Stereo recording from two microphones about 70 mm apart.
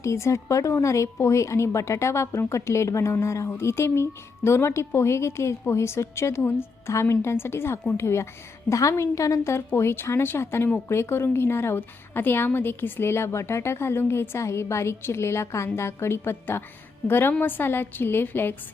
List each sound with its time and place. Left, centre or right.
0.0 s a woman's voice: left